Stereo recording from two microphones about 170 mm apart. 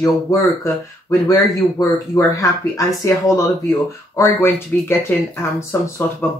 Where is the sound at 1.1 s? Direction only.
20° left (ahead or behind).